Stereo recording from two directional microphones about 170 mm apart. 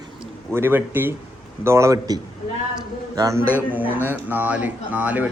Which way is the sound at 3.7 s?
10° right (ahead or behind).